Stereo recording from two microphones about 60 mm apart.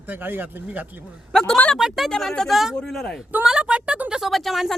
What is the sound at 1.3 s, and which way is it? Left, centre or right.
Speech, centre.